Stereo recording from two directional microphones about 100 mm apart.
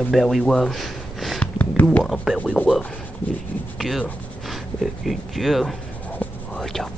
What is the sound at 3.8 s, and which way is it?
Speech, centre (ahead or behind).